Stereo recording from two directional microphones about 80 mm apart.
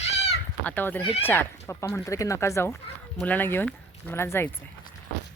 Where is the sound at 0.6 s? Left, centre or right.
Left.